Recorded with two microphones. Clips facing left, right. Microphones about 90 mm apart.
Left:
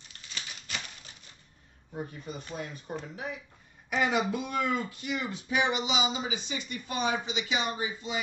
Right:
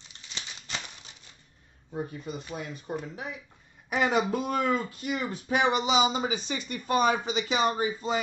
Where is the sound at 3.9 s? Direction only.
40° right (ahead or behind).